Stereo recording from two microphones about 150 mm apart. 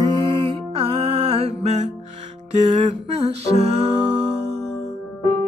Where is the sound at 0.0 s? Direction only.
35° right (ahead or behind).